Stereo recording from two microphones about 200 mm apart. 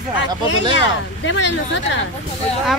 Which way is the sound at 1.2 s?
65° left (ahead or behind).